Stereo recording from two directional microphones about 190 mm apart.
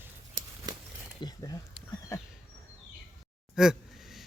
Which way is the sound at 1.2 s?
20° left (ahead or behind).